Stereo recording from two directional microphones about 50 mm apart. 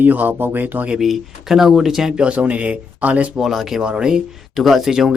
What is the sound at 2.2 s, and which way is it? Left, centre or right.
Speech, right.